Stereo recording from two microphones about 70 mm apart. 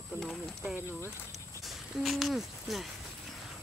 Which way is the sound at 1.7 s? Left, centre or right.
Centre.